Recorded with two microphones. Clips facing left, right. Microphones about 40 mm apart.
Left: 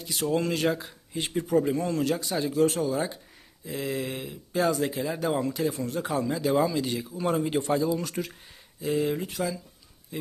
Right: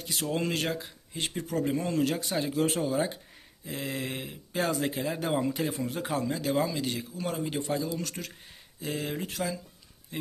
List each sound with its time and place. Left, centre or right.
0.0 s speech: centre
1.4 s speech: centre
1.6 s speech: centre
6.1 s speech: centre
7.4 s a man's voice: left
7.9 s speech: centre